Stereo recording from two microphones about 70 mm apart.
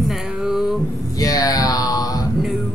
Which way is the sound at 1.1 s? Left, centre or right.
Left.